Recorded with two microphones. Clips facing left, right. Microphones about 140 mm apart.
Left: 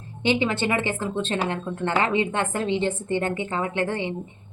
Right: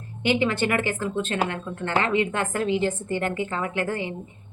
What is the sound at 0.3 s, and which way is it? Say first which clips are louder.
A woman's voice: even; 20° left (ahead or behind).